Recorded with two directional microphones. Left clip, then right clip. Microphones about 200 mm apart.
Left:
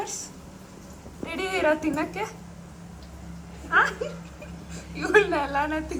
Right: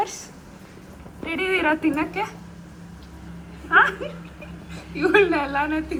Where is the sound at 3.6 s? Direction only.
10° left (ahead or behind).